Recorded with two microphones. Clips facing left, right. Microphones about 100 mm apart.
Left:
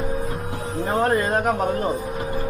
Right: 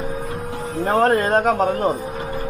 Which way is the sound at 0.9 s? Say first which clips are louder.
Right 4 dB; 45° right (ahead or behind).